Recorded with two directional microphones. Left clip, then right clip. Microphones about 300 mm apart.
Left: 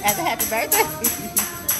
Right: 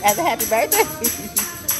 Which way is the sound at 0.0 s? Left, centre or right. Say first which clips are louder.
Right 4 dB; centre.